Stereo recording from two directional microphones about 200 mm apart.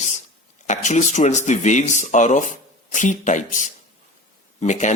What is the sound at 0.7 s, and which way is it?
A man's voice, 35° left (ahead or behind).